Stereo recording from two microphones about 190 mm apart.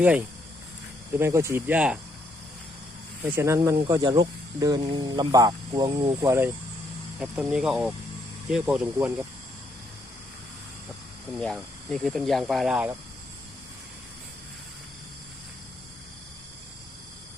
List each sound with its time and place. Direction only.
0.0 s speech: 5° right (ahead or behind)
3.2 s speech: 10° right (ahead or behind)
7.2 s speech: 5° right (ahead or behind)
11.3 s speech: 5° left (ahead or behind)